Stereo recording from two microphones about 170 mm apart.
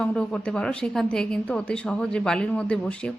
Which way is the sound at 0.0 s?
5° left (ahead or behind).